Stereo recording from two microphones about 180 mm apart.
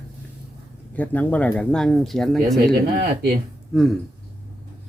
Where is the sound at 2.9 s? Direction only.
60° right (ahead or behind).